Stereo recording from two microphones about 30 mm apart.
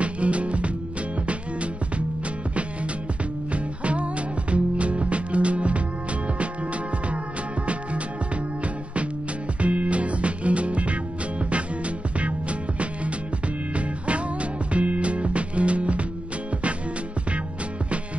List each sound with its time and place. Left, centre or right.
0.0 s music: right
3.5 s music: right
9.6 s music: right
12.2 s music: right